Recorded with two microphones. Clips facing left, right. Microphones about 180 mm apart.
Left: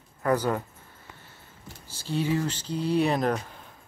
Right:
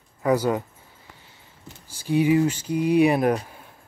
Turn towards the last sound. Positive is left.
turn(degrees=-10)  # may be behind; listen again after turning